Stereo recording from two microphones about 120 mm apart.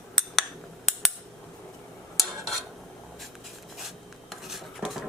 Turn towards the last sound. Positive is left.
turn(degrees=0)  # may be behind; listen again after turning